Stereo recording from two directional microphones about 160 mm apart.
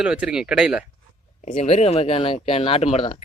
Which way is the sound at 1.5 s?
40° left (ahead or behind).